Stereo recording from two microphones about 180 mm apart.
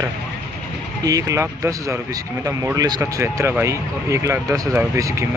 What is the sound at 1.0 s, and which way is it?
Speech, 20° right (ahead or behind).